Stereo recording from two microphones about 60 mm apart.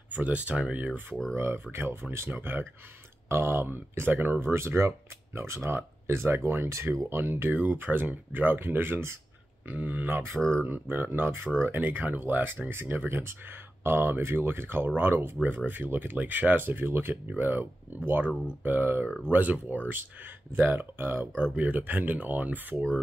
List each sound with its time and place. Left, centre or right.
0.1 s speech: right
1.3 s speech: right
9.7 s speech: right
19.0 s speech: centre
19.3 s speech: right
21.5 s speech: right